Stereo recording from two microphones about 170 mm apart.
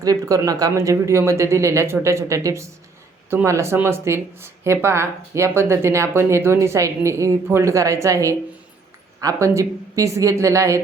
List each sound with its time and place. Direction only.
0.0 s speech: 20° right (ahead or behind)